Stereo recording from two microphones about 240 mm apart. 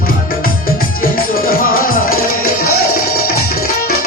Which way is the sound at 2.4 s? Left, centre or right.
Left.